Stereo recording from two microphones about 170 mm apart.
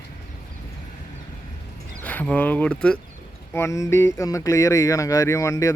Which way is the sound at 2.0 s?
10° left (ahead or behind).